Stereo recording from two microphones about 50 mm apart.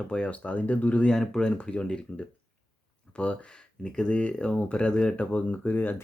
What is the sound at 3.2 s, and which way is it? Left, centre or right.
Speech, left.